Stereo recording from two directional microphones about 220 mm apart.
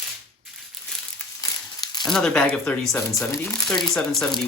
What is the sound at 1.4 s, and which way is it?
Crumpling, 15° left (ahead or behind).